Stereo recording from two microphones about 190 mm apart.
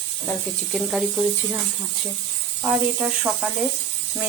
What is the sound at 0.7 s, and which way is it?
Speech, centre (ahead or behind).